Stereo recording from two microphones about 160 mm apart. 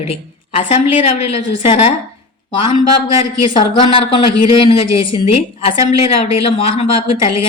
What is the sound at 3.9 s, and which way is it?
Speech, 35° left (ahead or behind).